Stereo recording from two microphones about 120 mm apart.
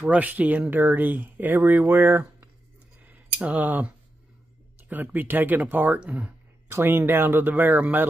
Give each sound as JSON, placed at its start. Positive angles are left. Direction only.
{"t": 0.0, "sound": "speech", "side_deg": -15}
{"t": 3.1, "sound": "a sound", "side_deg": -10}
{"t": 4.8, "sound": "speech", "side_deg": -15}